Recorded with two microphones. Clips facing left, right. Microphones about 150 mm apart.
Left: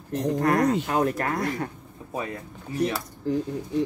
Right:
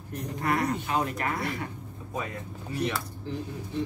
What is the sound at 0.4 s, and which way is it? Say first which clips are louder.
Speech: left 5 dB; 45° left (ahead or behind).